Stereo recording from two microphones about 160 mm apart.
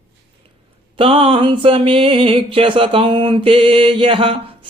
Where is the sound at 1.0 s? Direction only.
35° right (ahead or behind).